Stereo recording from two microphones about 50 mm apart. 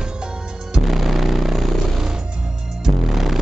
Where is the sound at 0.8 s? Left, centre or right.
Centre.